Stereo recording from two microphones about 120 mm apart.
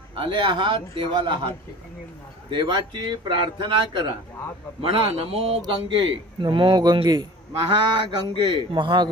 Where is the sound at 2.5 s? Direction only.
40° right (ahead or behind); by 5.6 s 55° right (ahead or behind).